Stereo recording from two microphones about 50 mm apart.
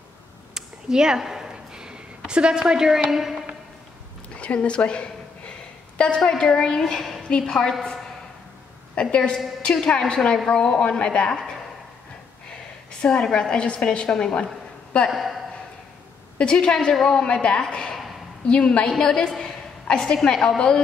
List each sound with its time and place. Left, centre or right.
0.6 s a sound: centre
4.4 s a sound: left
5.9 s a woman's voice: centre
7.2 s a woman's voice: centre
8.9 s a woman's voice: left
13.0 s a woman's voice: centre
15.0 s speech: centre
16.3 s a woman's voice: centre
18.9 s a woman's voice: centre